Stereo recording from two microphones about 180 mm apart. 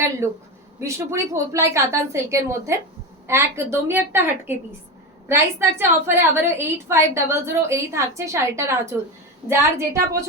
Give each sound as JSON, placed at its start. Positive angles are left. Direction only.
{"t": 0.8, "sound": "a woman's voice", "side_deg": -15}